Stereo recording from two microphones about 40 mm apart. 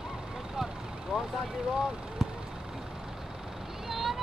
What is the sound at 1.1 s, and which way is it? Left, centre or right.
Vehicle, right.